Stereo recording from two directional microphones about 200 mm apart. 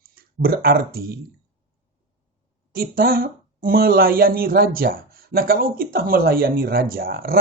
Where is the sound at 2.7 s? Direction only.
50° right (ahead or behind).